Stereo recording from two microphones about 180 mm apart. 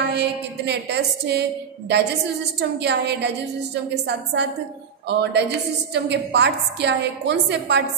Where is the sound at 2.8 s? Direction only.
70° right (ahead or behind).